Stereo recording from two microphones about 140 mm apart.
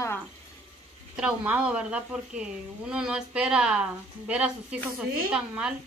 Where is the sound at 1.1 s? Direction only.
10° right (ahead or behind).